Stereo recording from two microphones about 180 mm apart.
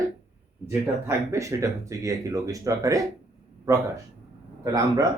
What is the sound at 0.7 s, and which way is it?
A man's voice, 15° right (ahead or behind).